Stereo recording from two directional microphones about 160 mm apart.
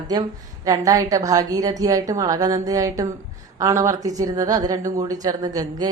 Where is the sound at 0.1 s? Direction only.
25° right (ahead or behind).